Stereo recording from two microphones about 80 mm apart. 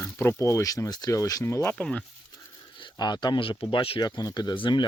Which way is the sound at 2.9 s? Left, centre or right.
Left.